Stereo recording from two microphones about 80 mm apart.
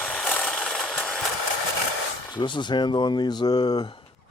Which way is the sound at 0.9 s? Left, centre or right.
Centre.